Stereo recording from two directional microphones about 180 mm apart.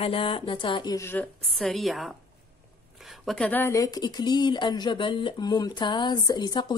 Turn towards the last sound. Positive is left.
turn(degrees=25)  # may be behind; listen again after turning